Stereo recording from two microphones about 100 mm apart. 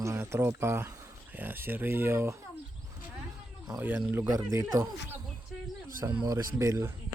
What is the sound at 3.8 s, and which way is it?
Speech, 20° right (ahead or behind).